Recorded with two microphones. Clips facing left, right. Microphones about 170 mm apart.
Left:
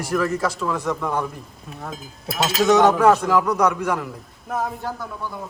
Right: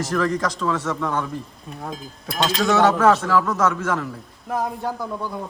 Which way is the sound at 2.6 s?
20° left (ahead or behind).